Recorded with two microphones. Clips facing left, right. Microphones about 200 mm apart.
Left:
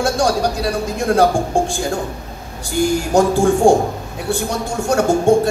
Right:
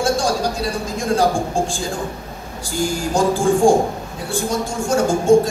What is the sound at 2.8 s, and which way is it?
A man's voice, 65° left (ahead or behind).